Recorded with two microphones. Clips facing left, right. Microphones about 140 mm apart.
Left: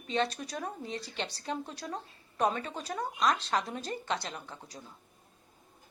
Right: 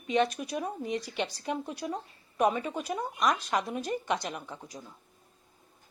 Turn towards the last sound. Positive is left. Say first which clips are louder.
# right 4 dB
turn(degrees=-15)  # may be behind; listen again after turning